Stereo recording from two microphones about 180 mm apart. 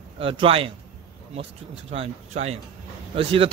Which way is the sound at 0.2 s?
30° right (ahead or behind).